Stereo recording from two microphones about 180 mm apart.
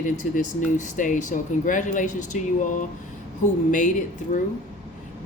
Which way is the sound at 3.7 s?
45° left (ahead or behind).